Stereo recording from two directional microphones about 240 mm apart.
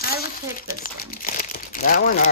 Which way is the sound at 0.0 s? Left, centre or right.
Left.